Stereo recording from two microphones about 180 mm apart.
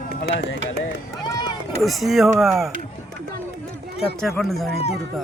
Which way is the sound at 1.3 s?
25° left (ahead or behind).